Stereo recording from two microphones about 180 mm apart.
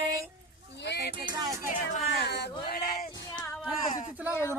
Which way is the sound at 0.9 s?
65° left (ahead or behind).